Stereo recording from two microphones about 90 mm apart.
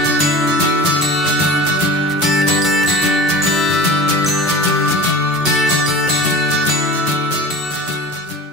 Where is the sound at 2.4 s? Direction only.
Centre (ahead or behind).